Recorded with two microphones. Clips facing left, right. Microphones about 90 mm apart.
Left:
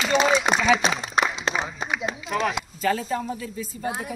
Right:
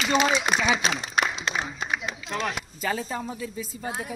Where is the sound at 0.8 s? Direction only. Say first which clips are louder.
Left 3 dB; 30° left (ahead or behind).